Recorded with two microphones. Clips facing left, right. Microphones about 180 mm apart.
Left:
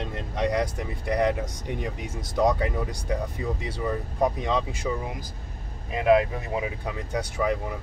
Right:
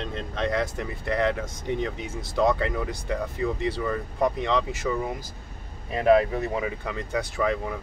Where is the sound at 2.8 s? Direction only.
Centre (ahead or behind).